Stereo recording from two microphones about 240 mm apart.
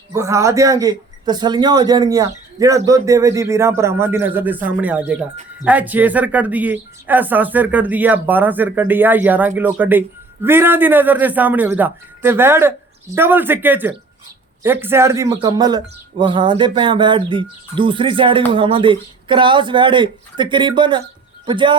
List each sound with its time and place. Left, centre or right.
0.1 s speech: centre